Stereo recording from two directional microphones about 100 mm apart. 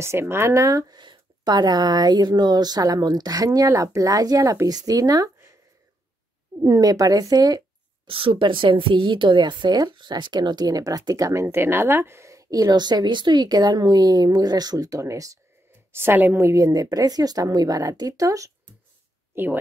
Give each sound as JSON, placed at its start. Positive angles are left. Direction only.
{"t": 0.0, "sound": "speech", "side_deg": -25}
{"t": 6.6, "sound": "speech", "side_deg": -40}
{"t": 8.1, "sound": "a woman's voice", "side_deg": -60}
{"t": 11.4, "sound": "speech", "side_deg": -20}
{"t": 15.9, "sound": "speech", "side_deg": -25}
{"t": 19.3, "sound": "speech", "side_deg": -25}